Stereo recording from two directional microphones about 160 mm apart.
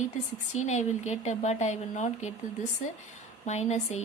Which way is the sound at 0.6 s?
45° left (ahead or behind).